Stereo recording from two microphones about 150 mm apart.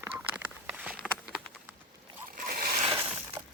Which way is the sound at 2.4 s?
75° right (ahead or behind).